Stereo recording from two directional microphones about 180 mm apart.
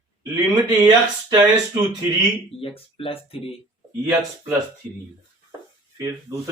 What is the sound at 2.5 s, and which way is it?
Speech, 30° left (ahead or behind).